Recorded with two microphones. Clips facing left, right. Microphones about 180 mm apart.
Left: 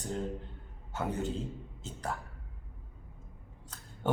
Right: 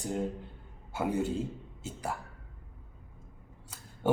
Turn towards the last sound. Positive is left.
turn(degrees=-10)  # may be behind; listen again after turning